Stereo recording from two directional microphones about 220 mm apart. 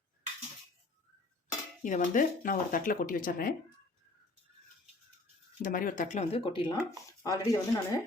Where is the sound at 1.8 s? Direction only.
35° left (ahead or behind).